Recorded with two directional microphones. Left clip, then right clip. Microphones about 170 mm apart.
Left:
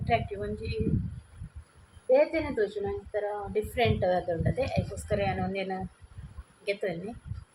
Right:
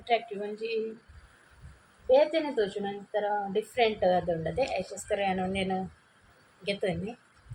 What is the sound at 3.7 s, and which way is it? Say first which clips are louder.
A woman's voice: right 2 dB; 5° right (ahead or behind).